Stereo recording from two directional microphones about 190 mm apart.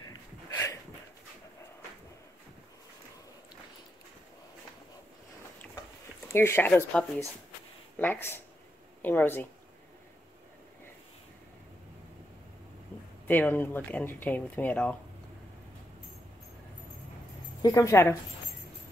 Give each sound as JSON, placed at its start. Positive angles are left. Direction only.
{"t": 0.0, "sound": "a sound", "side_deg": 20}
{"t": 6.2, "sound": "speech", "side_deg": 10}
{"t": 13.3, "sound": "speech", "side_deg": 10}
{"t": 17.6, "sound": "speech", "side_deg": 15}